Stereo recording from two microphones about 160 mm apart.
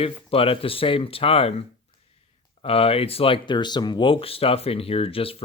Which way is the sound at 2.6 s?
35° left (ahead or behind).